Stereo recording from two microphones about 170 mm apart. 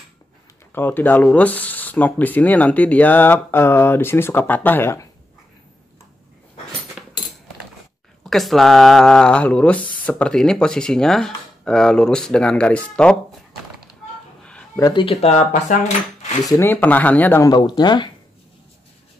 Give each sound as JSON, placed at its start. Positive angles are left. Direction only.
{"t": 0.7, "sound": "speech", "side_deg": 10}
{"t": 8.3, "sound": "speech", "side_deg": 0}
{"t": 14.8, "sound": "speech", "side_deg": 20}
{"t": 15.0, "sound": "cutlery", "side_deg": 40}
{"t": 16.4, "sound": "speech", "side_deg": 15}